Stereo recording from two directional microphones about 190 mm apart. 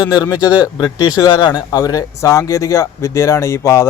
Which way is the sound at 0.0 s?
20° left (ahead or behind).